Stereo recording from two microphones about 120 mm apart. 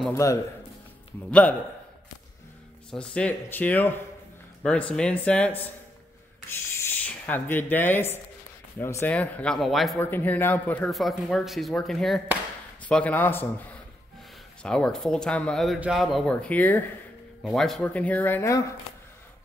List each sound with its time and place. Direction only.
0.1 s a man's voice: 25° left (ahead or behind)
2.9 s speech: 10° left (ahead or behind)
6.8 s speech: 15° left (ahead or behind)
9.9 s speech: 15° left (ahead or behind)
10.9 s speech: centre (ahead or behind)
17.4 s speech: centre (ahead or behind); by 18.6 s 20° left (ahead or behind)